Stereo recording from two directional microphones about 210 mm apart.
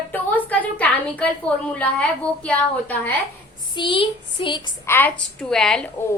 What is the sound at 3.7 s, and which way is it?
Speech, 25° left (ahead or behind).